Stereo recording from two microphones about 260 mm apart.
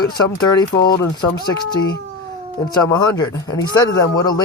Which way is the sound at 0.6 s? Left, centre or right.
Centre.